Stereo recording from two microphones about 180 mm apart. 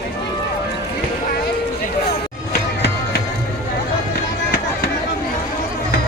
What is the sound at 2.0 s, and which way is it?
Music, 65° left (ahead or behind).